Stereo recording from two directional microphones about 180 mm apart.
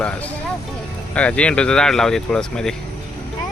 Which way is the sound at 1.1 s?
5° left (ahead or behind).